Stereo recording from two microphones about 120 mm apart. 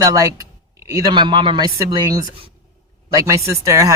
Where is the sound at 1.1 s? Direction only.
40° right (ahead or behind).